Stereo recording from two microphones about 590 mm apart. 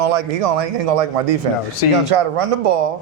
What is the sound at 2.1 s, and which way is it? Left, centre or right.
Speech, right.